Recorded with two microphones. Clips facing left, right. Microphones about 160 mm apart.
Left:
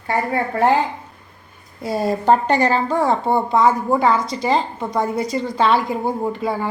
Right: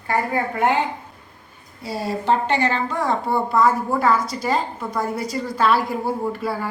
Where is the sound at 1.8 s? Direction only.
50° left (ahead or behind); by 6.6 s 20° left (ahead or behind).